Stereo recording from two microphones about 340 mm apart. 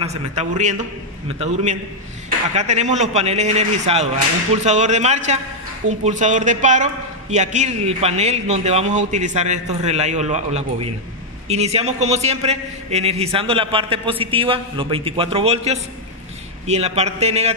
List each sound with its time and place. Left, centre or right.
0.0 s a man's voice: centre